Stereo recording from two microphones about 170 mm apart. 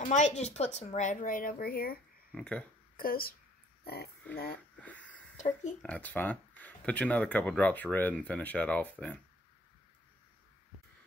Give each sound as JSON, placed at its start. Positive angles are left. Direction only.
{"t": 0.0, "sound": "speech", "side_deg": 45}
{"t": 2.3, "sound": "speech", "side_deg": 5}
{"t": 3.0, "sound": "speech", "side_deg": 60}
{"t": 4.8, "sound": "a sound", "side_deg": 10}
{"t": 5.4, "sound": "speech", "side_deg": 45}
{"t": 5.8, "sound": "speech", "side_deg": 10}